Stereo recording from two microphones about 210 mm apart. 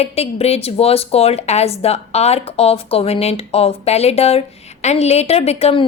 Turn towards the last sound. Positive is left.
turn(degrees=30)  # may be behind; listen again after turning